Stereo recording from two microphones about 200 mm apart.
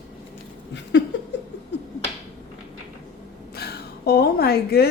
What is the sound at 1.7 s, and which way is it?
Finger snapping, 60° left (ahead or behind).